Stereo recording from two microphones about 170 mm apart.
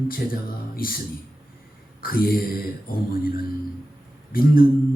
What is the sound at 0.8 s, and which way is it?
Speech, 60° left (ahead or behind).